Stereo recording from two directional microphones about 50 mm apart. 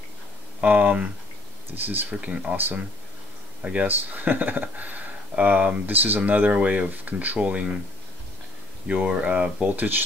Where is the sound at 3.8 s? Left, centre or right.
Right.